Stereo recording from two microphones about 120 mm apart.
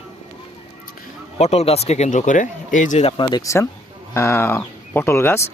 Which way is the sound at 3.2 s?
30° left (ahead or behind).